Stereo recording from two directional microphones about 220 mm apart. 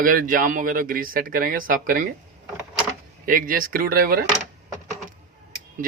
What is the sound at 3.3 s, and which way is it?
Speech, 40° right (ahead or behind).